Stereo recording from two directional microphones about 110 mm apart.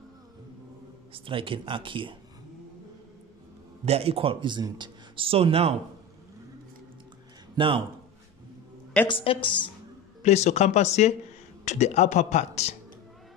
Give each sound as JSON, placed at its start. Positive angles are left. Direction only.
{"t": 1.1, "sound": "speech", "side_deg": -55}
{"t": 3.8, "sound": "speech", "side_deg": -70}
{"t": 7.5, "sound": "speech", "side_deg": -50}
{"t": 9.0, "sound": "a woman's voice", "side_deg": 50}
{"t": 10.2, "sound": "speech", "side_deg": 90}
{"t": 11.6, "sound": "speech", "side_deg": 90}